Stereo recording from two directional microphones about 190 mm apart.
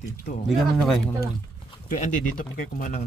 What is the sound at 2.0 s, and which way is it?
Speech, 45° left (ahead or behind).